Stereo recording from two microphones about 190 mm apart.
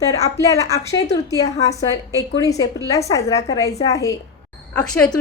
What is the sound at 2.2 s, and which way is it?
A woman's voice, 15° left (ahead or behind).